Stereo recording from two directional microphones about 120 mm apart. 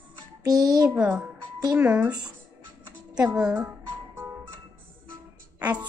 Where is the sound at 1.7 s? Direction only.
15° right (ahead or behind).